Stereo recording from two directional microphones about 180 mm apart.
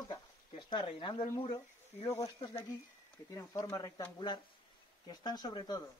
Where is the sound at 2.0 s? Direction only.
15° left (ahead or behind).